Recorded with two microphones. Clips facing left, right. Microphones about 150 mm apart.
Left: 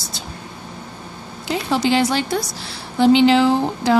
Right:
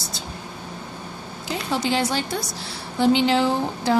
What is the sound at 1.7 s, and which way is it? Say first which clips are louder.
A woman's voice: left 5 dB; 85° left.